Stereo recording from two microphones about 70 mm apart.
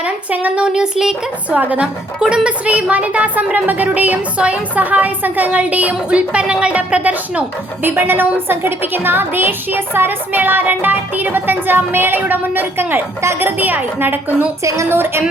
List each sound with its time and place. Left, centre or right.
0.0 s speech: centre
1.5 s a woman's voice: centre